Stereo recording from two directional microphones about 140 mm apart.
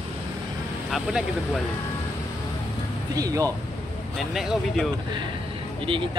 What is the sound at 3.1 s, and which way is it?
Speech, 25° right (ahead or behind).